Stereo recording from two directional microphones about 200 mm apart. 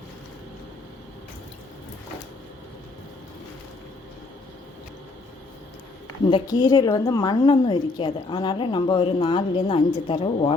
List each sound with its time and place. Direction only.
6.3 s a woman's voice: 20° left (ahead or behind)